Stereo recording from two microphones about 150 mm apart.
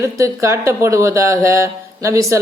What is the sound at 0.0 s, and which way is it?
Speech, 20° right (ahead or behind).